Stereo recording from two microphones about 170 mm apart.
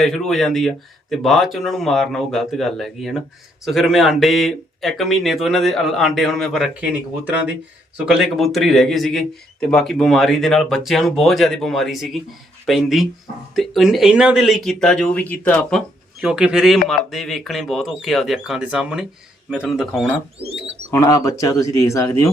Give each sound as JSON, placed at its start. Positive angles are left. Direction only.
{"t": 0.0, "sound": "a man's voice", "side_deg": 0}
{"t": 7.9, "sound": "a man's voice", "side_deg": -5}
{"t": 16.2, "sound": "a man's voice", "side_deg": -5}
{"t": 20.4, "sound": "speech", "side_deg": -35}
{"t": 20.9, "sound": "speech", "side_deg": 20}